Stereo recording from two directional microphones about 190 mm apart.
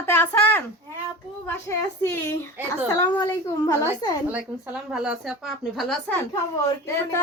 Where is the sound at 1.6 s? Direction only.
10° left (ahead or behind).